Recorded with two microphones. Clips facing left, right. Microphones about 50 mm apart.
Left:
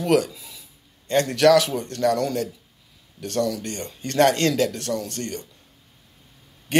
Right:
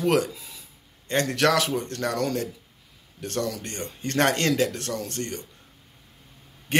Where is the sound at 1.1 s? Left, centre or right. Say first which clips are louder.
Left 5 dB; right.